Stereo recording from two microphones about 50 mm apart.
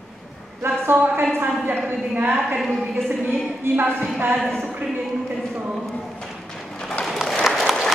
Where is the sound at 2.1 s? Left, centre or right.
Right.